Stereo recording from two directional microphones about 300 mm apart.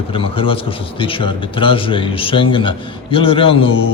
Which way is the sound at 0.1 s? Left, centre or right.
Centre.